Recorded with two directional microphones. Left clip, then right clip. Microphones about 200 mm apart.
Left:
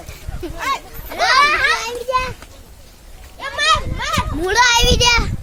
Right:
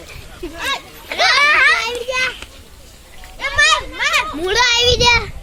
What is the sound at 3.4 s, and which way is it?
Children playing, 50° right (ahead or behind).